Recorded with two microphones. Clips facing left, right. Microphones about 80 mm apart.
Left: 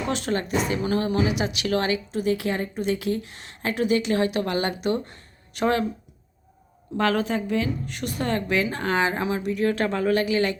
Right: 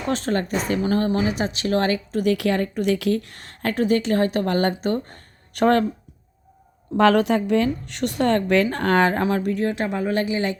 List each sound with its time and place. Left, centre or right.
0.1 s a woman's voice: right
2.2 s a woman's voice: right
6.9 s a woman's voice: right
9.6 s speech: right